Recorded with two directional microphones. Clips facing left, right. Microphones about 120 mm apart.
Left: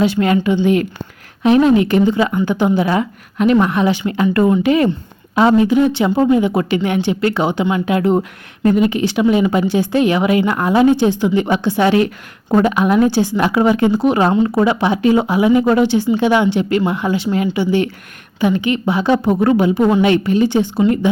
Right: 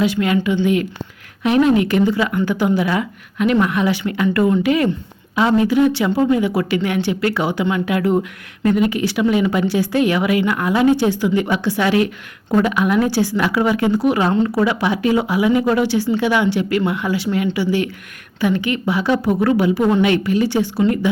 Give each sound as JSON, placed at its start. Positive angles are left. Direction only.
{"t": 0.0, "sound": "a woman's voice", "side_deg": 35}